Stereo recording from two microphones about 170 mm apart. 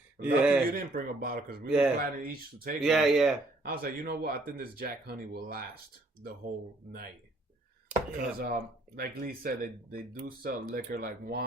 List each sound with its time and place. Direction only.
0.2 s a man's voice: 5° right (ahead or behind)
0.7 s speech: 55° right (ahead or behind)
1.6 s speech: 5° right (ahead or behind)
2.0 s speech: 55° right (ahead or behind)
2.8 s speech: centre (ahead or behind)
3.6 s speech: 60° right (ahead or behind)
7.9 s a sound: 5° right (ahead or behind)
8.4 s speech: 60° right (ahead or behind)